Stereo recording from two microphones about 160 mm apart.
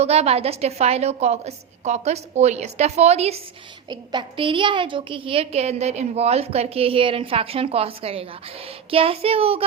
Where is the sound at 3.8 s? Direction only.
30° right (ahead or behind).